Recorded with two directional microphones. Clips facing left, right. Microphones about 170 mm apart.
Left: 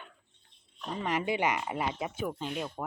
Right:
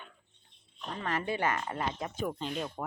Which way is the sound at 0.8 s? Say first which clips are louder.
Left 3 dB; 10° left (ahead or behind).